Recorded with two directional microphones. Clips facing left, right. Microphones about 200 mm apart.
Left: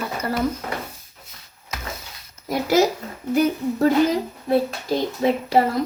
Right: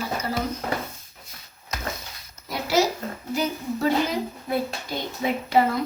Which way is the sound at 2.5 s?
50° left (ahead or behind).